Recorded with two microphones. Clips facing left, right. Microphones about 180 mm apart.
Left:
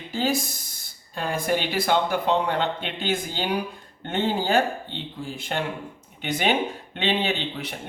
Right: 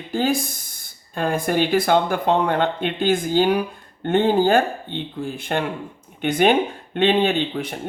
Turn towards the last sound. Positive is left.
turn(degrees=-50)  # may be behind; listen again after turning